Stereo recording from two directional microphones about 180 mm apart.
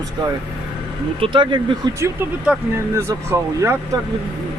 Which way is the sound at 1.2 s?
25° right (ahead or behind).